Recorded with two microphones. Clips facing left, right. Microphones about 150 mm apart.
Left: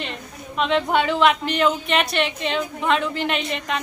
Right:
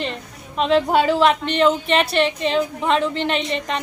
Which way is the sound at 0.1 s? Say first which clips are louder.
Right 1 dB; 35° right (ahead or behind).